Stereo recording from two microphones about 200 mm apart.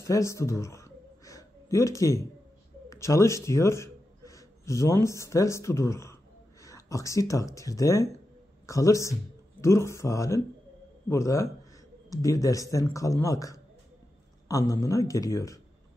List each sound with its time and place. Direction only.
0.0 s gasp: 15° left (ahead or behind)
2.9 s a man's voice: 15° left (ahead or behind)